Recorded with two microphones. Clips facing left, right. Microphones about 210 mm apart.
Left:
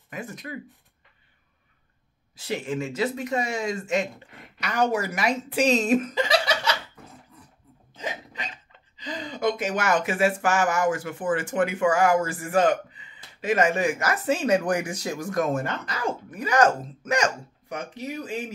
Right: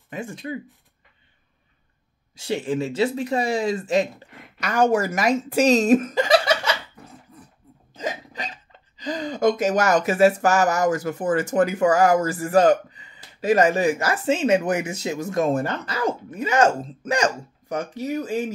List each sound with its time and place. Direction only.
0.1 s speech: 30° right (ahead or behind)
2.3 s speech: 30° right (ahead or behind)
4.6 s speech: 45° right (ahead or behind)
8.0 s hiccup: 40° right (ahead or behind)
8.9 s speech: 45° right (ahead or behind)